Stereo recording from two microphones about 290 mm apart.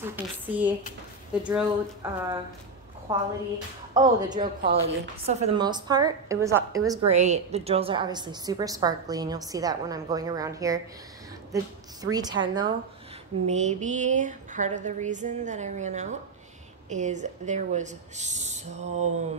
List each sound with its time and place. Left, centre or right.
0.0 s speech: centre
3.1 s a woman's voice: centre
7.1 s a woman's voice: right
13.5 s a sound: right